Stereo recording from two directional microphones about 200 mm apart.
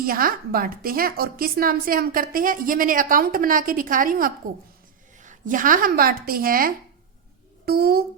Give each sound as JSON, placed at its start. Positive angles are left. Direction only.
{"t": 0.0, "sound": "a woman's voice", "side_deg": -45}